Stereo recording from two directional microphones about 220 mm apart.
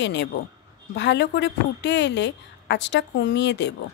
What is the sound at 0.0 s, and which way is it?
Speech, 50° left (ahead or behind).